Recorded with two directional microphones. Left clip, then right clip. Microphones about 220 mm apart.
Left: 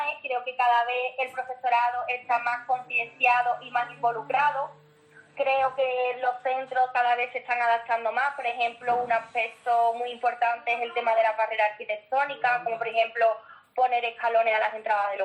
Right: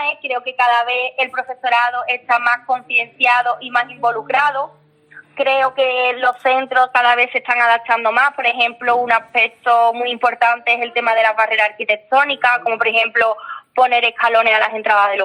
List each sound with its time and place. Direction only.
0.0 s a woman's voice: 45° right (ahead or behind)